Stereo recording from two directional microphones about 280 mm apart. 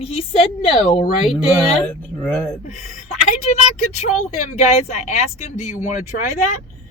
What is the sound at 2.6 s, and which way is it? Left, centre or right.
Speech, left.